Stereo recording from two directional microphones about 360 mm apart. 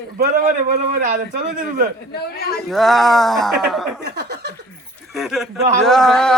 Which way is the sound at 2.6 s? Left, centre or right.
Centre.